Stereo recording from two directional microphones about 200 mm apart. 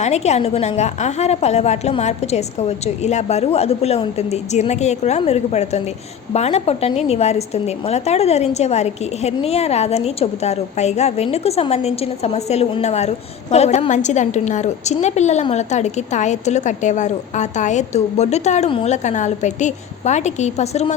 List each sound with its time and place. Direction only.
0.0 s a woman's voice: 35° left (ahead or behind)